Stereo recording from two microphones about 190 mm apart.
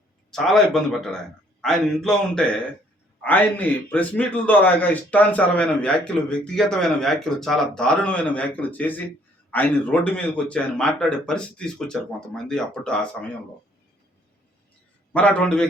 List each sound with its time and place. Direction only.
0.3 s a man's voice: centre (ahead or behind)
15.1 s a man's voice: 5° left (ahead or behind)